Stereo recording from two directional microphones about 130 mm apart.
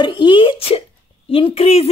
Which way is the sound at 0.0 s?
35° left (ahead or behind).